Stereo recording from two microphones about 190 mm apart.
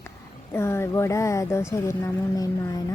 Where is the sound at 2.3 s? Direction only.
20° left (ahead or behind).